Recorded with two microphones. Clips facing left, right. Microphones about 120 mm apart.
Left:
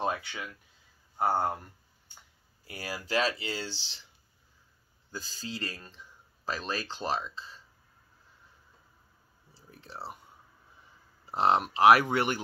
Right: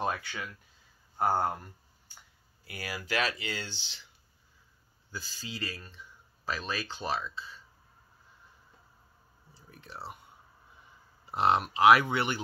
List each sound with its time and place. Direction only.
0.0 s speech: 20° left (ahead or behind)
2.6 s speech: 35° left (ahead or behind)
5.1 s speech: 40° left (ahead or behind)
9.5 s speech: 30° left (ahead or behind)
11.2 s speech: 35° left (ahead or behind)